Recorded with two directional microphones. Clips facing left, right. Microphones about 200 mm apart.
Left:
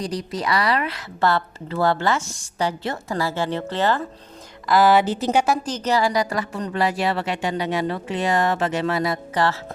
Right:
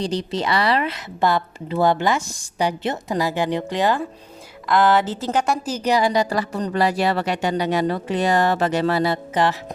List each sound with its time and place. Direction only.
0.0 s a woman's voice: 30° right (ahead or behind)
4.7 s a woman's voice: 10° left (ahead or behind)
5.6 s speech: 10° right (ahead or behind); by 9.1 s 35° right (ahead or behind)
9.3 s music: 20° right (ahead or behind)